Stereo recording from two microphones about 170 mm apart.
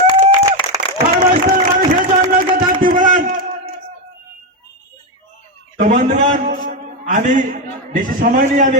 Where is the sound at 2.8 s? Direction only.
50° right (ahead or behind).